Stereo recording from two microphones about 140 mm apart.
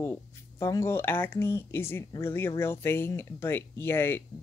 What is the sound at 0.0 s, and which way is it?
Speech, 15° left (ahead or behind).